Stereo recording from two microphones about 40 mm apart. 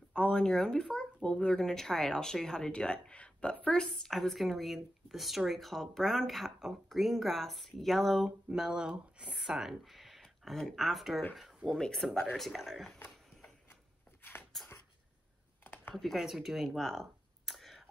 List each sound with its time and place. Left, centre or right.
0.1 s speech: left; by 8.3 s centre
8.5 s speech: centre
9.3 s speech: centre
11.6 s speech: centre
12.4 s speech: centre
14.5 s a sound: centre
15.6 s computer keyboard: left
15.9 s speech: centre